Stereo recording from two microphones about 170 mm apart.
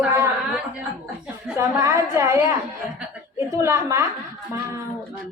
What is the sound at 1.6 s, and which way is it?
Speech, 15° right (ahead or behind).